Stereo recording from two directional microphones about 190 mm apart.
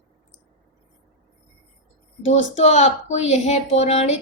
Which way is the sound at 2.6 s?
40° left (ahead or behind).